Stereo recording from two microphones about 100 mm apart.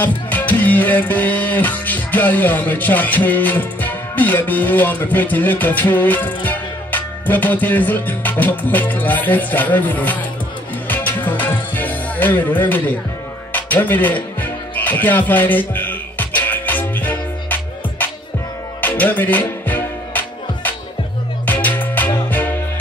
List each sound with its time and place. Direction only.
0.0 s music: 20° left (ahead or behind)